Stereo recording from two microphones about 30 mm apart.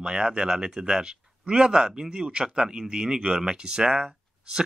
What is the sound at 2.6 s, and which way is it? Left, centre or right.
Speech, centre.